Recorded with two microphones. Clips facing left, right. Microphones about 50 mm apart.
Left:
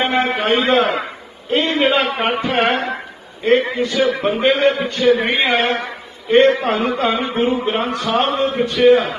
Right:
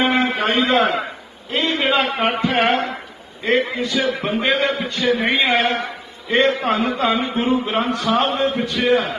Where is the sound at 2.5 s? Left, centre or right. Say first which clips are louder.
Left 1 dB; left.